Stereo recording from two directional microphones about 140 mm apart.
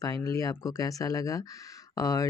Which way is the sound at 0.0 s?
25° left (ahead or behind).